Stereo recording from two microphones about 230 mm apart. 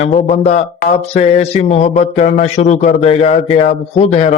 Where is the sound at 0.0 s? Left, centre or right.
Left.